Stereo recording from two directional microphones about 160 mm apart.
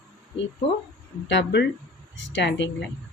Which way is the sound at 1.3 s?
90° left.